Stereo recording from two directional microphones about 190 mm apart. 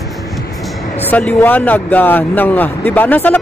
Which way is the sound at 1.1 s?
10° left (ahead or behind).